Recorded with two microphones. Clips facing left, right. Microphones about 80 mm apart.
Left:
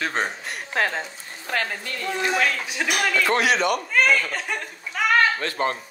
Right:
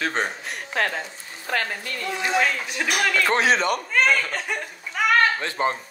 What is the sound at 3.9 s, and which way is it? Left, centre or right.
Speech, centre.